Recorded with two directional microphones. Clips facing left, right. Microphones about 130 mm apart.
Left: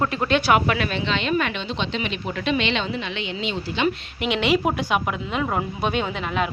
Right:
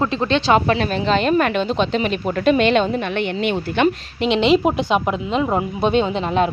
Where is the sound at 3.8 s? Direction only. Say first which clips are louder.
Right 4 dB; 30° right (ahead or behind).